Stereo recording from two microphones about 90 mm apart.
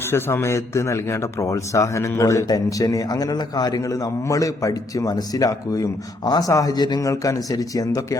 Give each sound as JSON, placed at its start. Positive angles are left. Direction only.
{"t": 0.1, "sound": "a man's voice", "side_deg": 25}
{"t": 7.1, "sound": "a man's voice", "side_deg": 40}